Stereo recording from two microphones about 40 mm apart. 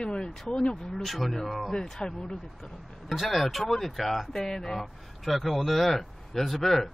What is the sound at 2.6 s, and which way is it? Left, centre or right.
Speech, centre.